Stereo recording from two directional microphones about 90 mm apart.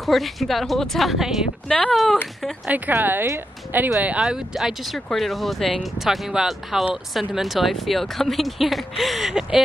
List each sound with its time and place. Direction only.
0.0 s speech: centre (ahead or behind)
1.7 s speech: 10° left (ahead or behind)
2.6 s speech: 20° right (ahead or behind)